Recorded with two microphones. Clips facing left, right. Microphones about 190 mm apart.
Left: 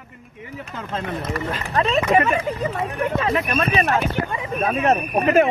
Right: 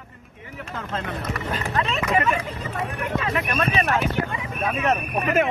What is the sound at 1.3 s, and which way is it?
Speech, 30° left (ahead or behind).